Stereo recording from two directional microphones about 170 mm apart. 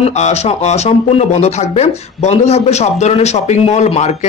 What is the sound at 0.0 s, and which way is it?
Speech, 40° left (ahead or behind).